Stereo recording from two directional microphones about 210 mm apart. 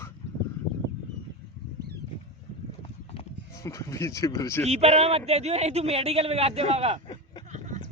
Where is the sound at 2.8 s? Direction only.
30° left (ahead or behind).